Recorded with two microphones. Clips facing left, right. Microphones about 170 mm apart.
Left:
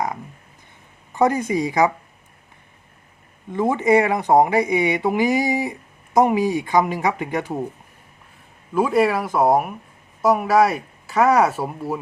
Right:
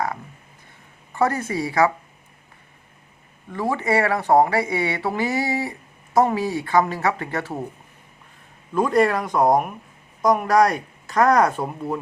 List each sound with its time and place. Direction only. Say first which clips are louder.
1.1 s speech: left 3 dB; 15° left (ahead or behind)
3.5 s speech: left 5 dB; 20° left (ahead or behind)
8.7 s speech: left 1 dB; 5° left (ahead or behind)